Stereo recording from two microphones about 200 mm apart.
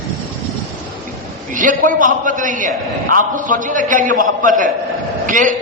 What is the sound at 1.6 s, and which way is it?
A man's voice, 40° right (ahead or behind).